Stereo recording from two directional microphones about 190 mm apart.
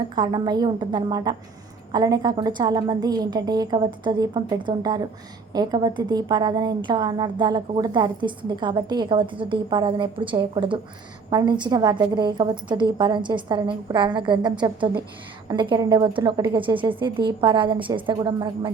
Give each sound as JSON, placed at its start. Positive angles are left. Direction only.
{"t": 0.2, "sound": "a woman's voice", "side_deg": -20}